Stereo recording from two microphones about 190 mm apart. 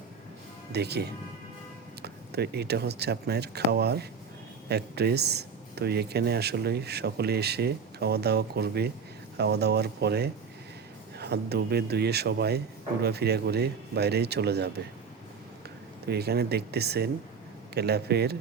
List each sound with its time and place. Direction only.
0.7 s speech: 60° right (ahead or behind)
16.0 s speech: 60° right (ahead or behind)